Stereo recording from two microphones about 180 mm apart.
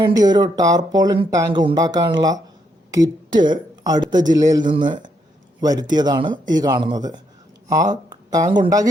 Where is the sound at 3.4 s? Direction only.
25° right (ahead or behind).